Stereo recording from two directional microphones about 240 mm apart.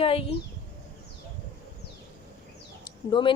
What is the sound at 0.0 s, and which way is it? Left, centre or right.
Speech, left.